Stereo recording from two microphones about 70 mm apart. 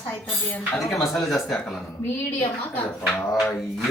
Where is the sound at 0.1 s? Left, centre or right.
Left.